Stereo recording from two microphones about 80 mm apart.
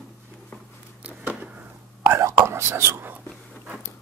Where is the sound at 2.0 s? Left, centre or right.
Right.